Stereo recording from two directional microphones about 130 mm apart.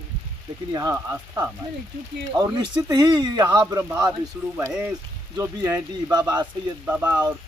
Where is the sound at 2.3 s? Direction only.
35° right (ahead or behind).